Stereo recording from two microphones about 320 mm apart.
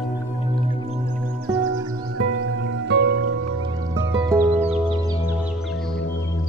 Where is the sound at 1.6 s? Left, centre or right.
Right.